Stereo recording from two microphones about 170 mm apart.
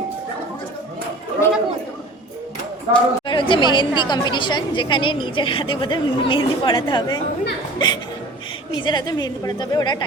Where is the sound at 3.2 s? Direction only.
30° left (ahead or behind).